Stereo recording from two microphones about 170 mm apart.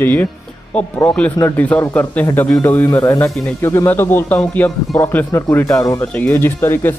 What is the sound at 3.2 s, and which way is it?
Speech, centre (ahead or behind).